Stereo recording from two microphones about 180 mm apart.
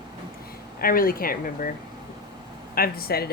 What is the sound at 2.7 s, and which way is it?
Speech, 55° left (ahead or behind).